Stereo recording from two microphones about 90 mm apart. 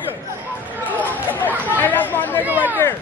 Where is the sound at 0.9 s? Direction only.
20° left (ahead or behind).